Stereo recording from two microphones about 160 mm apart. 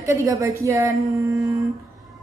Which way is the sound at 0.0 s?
20° right (ahead or behind).